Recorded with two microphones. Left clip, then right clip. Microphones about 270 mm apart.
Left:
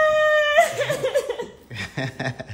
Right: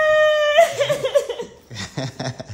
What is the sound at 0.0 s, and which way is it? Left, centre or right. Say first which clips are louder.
Whimper: right 2 dB; centre.